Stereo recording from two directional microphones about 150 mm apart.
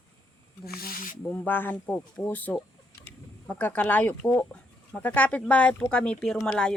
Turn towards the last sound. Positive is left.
turn(degrees=5)  # may be behind; listen again after turning